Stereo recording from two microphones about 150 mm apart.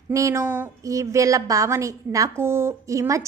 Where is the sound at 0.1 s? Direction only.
20° right (ahead or behind).